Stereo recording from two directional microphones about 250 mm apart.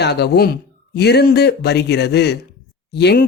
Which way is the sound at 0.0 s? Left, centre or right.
Left.